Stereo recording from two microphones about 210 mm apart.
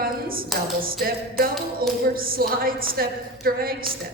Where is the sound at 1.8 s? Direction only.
45° right (ahead or behind).